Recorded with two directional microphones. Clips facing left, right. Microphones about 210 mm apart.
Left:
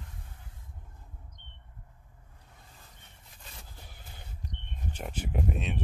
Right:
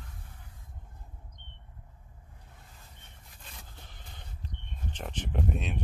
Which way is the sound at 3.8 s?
10° left (ahead or behind).